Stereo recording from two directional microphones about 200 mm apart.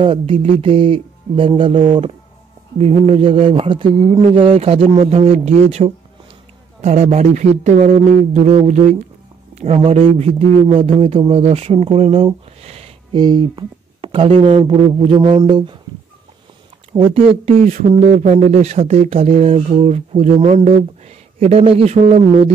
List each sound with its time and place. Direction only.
0.0 s a man's voice: 25° right (ahead or behind)
16.9 s speech: 25° right (ahead or behind)